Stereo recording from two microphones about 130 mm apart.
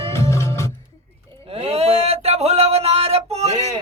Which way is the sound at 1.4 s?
50° right (ahead or behind).